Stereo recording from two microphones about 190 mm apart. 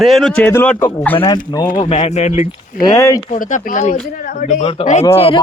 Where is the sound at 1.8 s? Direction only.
35° left (ahead or behind).